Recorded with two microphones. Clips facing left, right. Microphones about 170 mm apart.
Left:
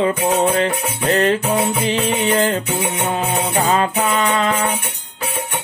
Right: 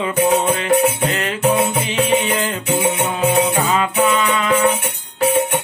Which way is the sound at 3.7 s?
40° left (ahead or behind).